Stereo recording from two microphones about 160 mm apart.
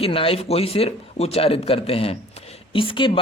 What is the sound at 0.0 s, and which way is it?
A man's voice, 35° left (ahead or behind).